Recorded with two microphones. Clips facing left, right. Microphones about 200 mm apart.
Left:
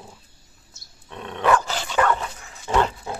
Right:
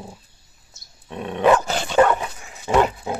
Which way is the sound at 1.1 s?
15° right (ahead or behind).